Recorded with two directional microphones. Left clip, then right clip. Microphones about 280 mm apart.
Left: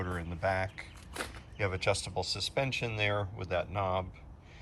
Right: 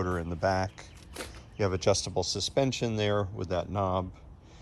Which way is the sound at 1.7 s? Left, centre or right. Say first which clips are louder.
Right 5 dB; centre.